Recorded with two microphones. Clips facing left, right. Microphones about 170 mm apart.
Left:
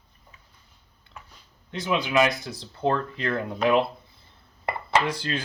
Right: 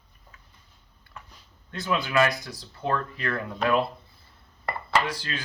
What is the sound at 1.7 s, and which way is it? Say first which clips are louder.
Speech: left 2 dB; 20° left (ahead or behind).